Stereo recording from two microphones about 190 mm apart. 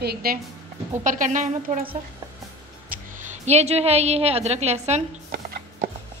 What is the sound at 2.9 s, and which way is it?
Speech, 45° right (ahead or behind).